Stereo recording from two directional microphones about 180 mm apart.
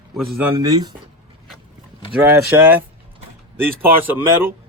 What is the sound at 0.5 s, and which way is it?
Speech, 25° right (ahead or behind).